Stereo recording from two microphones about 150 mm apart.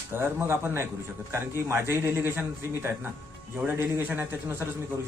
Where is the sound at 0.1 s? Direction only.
15° right (ahead or behind).